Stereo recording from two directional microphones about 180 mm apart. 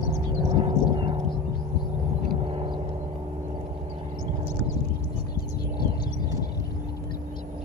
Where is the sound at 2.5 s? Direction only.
30° right (ahead or behind).